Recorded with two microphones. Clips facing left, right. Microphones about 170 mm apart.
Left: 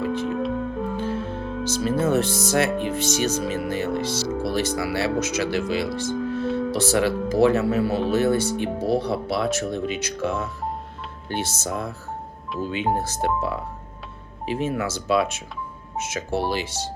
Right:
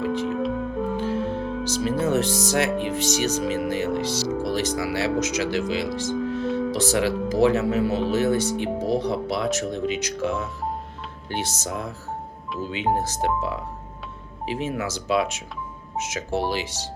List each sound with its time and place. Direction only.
0.3 s music: centre (ahead or behind)
0.9 s music: 15° right (ahead or behind)
2.0 s speech: 15° right (ahead or behind)